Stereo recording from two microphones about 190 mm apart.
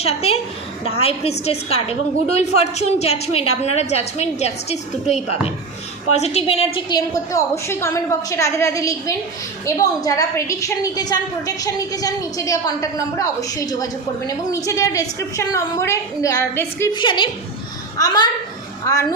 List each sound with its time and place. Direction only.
0.0 s a woman's voice: 30° left (ahead or behind)
6.7 s a woman's voice: 20° left (ahead or behind)